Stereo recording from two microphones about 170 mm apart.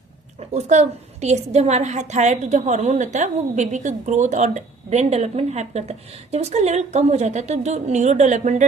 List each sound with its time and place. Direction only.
0.3 s a woman's voice: 40° right (ahead or behind)